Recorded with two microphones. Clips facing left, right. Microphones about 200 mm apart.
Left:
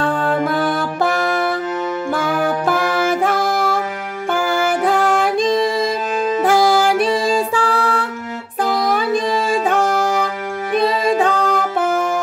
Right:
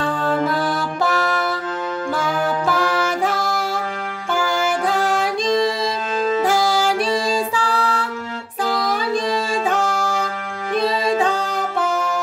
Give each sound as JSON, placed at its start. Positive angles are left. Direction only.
{"t": 0.0, "sound": "music", "side_deg": 60}